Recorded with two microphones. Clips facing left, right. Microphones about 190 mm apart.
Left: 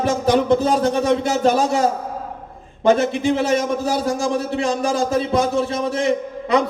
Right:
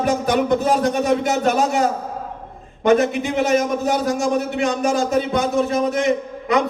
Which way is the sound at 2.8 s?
30° left (ahead or behind).